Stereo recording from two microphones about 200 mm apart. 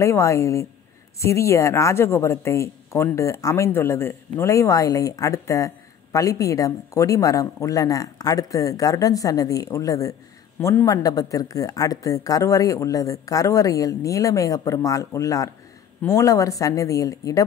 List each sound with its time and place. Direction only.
0.0 s speech: 15° left (ahead or behind)